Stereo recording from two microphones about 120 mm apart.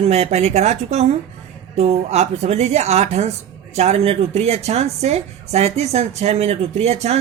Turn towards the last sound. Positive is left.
turn(degrees=-60)  # may be behind; listen again after turning